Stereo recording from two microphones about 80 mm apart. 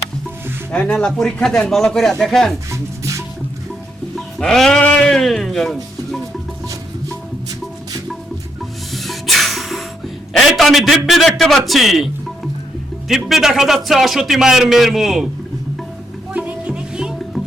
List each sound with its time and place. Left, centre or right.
0.7 s speech: centre
2.6 s music: right
4.4 s music: centre
4.8 s a man's voice: centre
8.9 s music: centre
10.3 s a man's voice: centre
13.1 s a man's voice: centre
16.3 s music: centre